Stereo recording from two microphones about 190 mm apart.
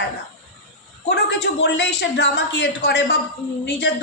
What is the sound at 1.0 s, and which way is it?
A woman's voice, 60° left (ahead or behind).